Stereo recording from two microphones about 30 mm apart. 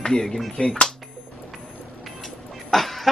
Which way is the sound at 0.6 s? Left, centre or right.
Left.